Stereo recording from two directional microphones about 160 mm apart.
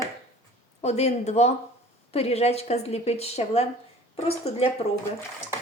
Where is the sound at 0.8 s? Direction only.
45° left (ahead or behind).